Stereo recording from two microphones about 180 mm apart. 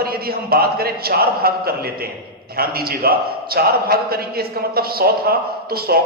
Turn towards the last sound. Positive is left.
turn(degrees=-60)  # may be behind; listen again after turning